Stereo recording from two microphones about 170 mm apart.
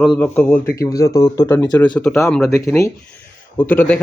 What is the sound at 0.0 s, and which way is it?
Speech, 5° left (ahead or behind).